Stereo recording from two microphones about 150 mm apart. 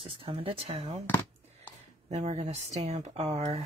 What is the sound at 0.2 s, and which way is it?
Speech, 40° right (ahead or behind).